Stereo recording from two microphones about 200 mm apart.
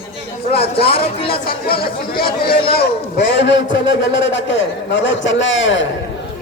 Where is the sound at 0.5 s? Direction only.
50° left (ahead or behind).